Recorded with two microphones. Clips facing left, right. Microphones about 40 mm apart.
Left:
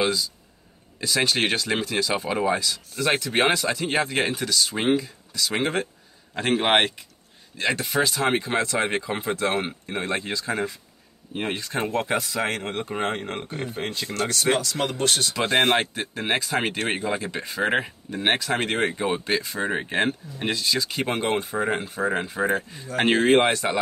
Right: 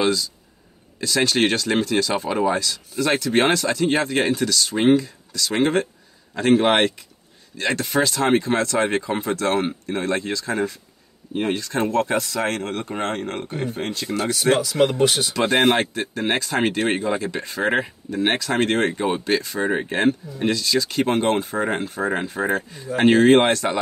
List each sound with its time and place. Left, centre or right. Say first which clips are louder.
0.0 s speech: right 3 dB; centre
14.1 s speech: right 4 dB; centre